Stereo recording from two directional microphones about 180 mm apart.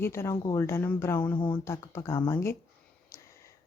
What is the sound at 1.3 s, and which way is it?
Speech, 25° left (ahead or behind).